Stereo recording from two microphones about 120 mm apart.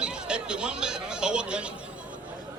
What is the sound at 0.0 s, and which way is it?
Chatter, 10° right (ahead or behind).